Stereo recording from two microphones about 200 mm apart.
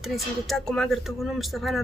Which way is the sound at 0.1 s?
Centre (ahead or behind).